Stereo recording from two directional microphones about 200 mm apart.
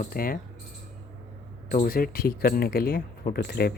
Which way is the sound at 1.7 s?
45° left (ahead or behind).